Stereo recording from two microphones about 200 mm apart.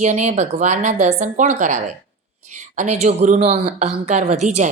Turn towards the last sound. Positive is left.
turn(degrees=-35)  # may be behind; listen again after turning